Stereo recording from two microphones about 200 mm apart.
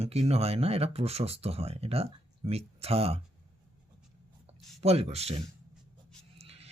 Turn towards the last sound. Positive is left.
turn(degrees=-30)  # may be behind; listen again after turning